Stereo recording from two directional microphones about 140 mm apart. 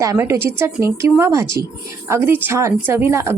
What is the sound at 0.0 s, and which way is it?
A woman's voice, 20° right (ahead or behind).